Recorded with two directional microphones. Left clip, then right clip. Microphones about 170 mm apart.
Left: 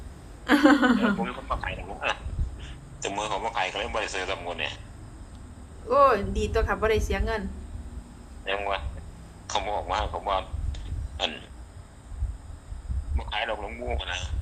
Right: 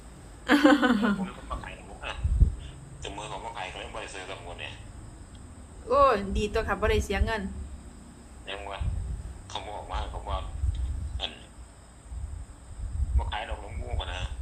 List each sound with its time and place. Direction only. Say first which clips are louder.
0.4 s a woman's voice: left 1 dB; centre (ahead or behind)
1.2 s a sound: left 7 dB; 65° left (ahead or behind)
2.6 s a man's voice: left 7 dB; 65° left (ahead or behind)
5.9 s speech: left 2 dB; 5° left (ahead or behind)
8.4 s speech: left 9 dB; 70° left (ahead or behind)
13.1 s speech: left 5 dB; 65° left (ahead or behind)